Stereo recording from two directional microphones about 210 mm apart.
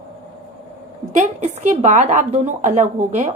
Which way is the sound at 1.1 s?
35° right (ahead or behind).